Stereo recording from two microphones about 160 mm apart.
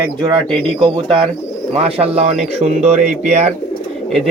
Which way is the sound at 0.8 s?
35° right (ahead or behind).